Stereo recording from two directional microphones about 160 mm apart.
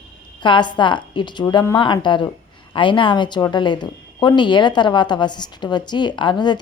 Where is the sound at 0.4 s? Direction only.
30° left (ahead or behind).